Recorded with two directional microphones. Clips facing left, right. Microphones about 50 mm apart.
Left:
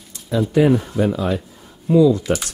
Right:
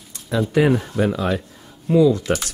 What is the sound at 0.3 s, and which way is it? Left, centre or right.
Speech, right.